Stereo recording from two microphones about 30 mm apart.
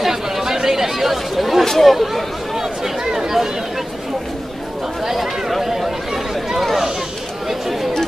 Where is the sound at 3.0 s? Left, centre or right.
Centre.